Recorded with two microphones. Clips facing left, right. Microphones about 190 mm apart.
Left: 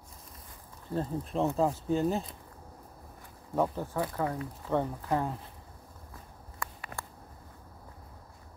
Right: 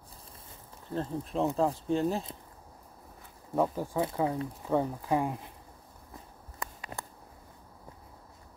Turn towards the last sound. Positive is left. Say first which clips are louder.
# even
turn(degrees=-20)  # may be behind; listen again after turning